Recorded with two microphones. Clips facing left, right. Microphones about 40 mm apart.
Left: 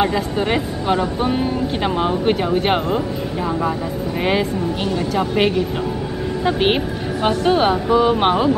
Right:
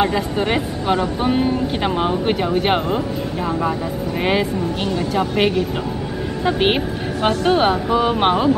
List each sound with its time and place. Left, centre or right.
0.0 s speech: centre
5.1 s speech: centre